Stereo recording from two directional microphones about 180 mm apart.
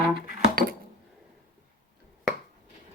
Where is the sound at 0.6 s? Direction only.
55° right (ahead or behind).